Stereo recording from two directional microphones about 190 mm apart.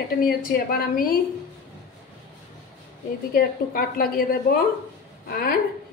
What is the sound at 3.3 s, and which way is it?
A woman's voice, 50° left (ahead or behind).